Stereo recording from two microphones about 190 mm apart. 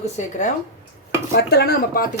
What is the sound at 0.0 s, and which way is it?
Speech, 40° left (ahead or behind).